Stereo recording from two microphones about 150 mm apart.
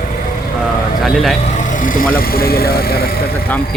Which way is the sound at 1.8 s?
65° left (ahead or behind).